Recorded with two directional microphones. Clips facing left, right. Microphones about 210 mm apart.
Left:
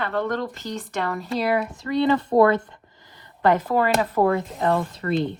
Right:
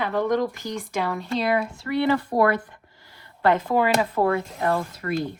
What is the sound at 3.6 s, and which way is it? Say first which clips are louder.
Speech: even; centre (ahead or behind).